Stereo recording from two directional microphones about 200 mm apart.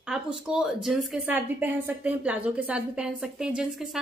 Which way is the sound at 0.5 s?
5° right (ahead or behind).